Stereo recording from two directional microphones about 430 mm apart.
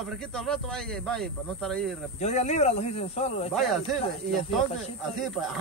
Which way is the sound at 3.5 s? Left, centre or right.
Centre.